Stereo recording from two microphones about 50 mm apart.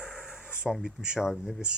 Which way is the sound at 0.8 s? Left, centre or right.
Centre.